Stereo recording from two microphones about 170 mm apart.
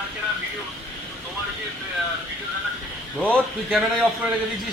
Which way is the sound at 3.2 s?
5° left (ahead or behind).